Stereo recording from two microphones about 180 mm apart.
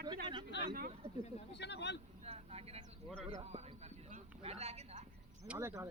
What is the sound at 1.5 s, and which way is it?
Vehicle, 70° left (ahead or behind).